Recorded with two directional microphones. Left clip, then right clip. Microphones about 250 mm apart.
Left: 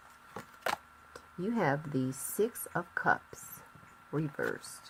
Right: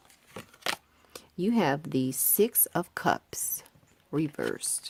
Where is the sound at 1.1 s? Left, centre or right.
Right.